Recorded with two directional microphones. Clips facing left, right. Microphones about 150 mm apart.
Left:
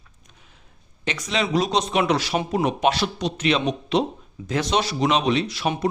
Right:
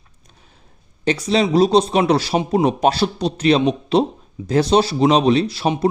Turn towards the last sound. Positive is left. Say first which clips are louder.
# right 6 dB
turn(degrees=-30)  # may be behind; listen again after turning